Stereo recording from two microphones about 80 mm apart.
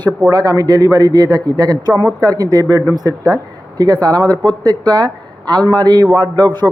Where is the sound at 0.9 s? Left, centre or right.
Right.